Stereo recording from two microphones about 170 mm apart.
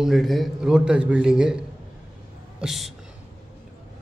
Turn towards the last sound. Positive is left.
turn(degrees=0)  # may be behind; listen again after turning